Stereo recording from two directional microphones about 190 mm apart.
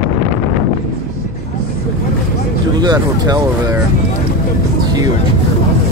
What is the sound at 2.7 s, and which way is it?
Speech, 20° right (ahead or behind).